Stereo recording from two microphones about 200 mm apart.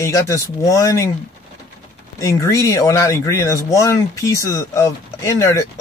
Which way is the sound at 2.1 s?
15° left (ahead or behind).